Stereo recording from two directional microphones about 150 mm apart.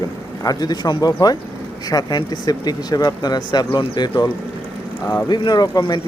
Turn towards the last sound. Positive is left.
turn(degrees=25)  # may be behind; listen again after turning